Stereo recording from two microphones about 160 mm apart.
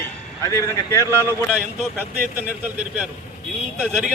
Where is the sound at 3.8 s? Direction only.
5° right (ahead or behind).